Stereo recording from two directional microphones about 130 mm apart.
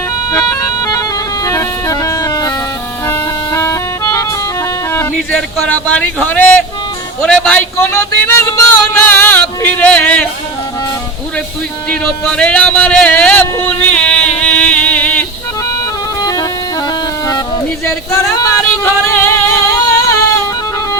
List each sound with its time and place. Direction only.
0.3 s music: 20° left (ahead or behind)
3.1 s music: 20° left (ahead or behind)
5.1 s a man's voice: 10° left (ahead or behind)
12.0 s speech: 5° left (ahead or behind)
13.4 s a sound: 15° left (ahead or behind)
15.8 s music: 25° left (ahead or behind)